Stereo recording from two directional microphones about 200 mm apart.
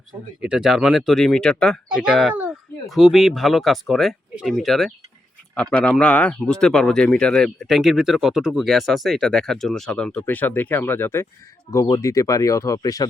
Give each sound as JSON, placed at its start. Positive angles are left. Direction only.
{"t": 0.1, "sound": "speech", "side_deg": -5}
{"t": 6.0, "sound": "speech", "side_deg": 5}